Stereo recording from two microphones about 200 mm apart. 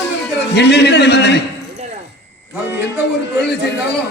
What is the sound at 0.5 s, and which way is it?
Speech, 60° left (ahead or behind).